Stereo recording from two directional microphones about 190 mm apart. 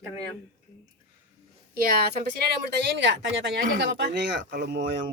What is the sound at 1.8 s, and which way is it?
Speech, 50° right (ahead or behind).